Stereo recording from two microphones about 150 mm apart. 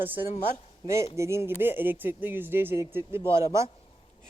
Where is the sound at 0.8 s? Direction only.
20° right (ahead or behind).